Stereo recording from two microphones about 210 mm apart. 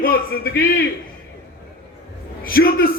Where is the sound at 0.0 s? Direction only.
45° left (ahead or behind).